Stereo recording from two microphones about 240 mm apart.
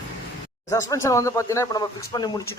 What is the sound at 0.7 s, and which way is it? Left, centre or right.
Speech, centre.